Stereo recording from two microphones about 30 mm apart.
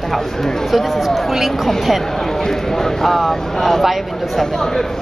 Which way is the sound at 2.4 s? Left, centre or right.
Centre.